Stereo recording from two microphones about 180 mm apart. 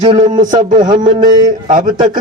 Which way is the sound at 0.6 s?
40° right (ahead or behind).